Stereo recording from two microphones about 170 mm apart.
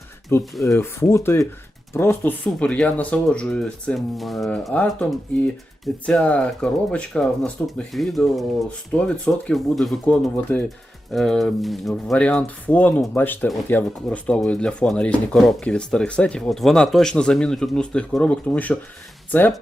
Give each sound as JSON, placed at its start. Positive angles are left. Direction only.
{"t": 0.6, "sound": "speech", "side_deg": 15}